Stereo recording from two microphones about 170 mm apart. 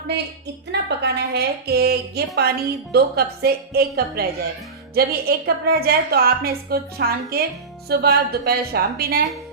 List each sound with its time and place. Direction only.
0.7 s a woman's voice: 85° right; by 9.2 s 65° right (ahead or behind)